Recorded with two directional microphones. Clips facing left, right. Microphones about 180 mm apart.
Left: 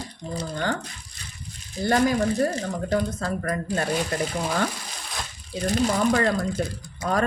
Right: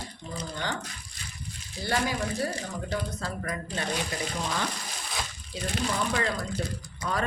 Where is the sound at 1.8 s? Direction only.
45° left (ahead or behind).